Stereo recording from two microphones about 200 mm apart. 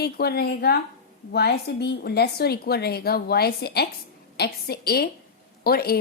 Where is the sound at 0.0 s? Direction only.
50° left (ahead or behind).